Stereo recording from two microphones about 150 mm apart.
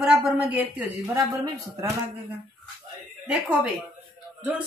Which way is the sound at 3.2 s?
10° right (ahead or behind).